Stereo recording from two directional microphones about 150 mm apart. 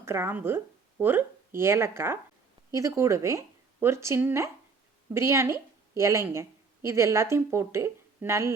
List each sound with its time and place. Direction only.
0.0 s a woman's voice: 15° right (ahead or behind)